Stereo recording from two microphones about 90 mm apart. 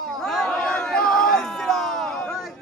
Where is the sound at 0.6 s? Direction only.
10° left (ahead or behind).